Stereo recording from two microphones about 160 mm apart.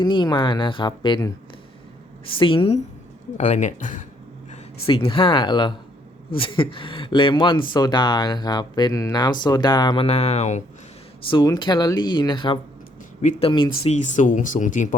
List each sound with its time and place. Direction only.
0.0 s speech: 25° left (ahead or behind)
2.4 s speech: 35° left (ahead or behind)
3.3 s speech: 50° left (ahead or behind)
4.9 s speech: 35° left (ahead or behind)
11.3 s speech: 30° left (ahead or behind)
13.8 s speech: 45° left (ahead or behind)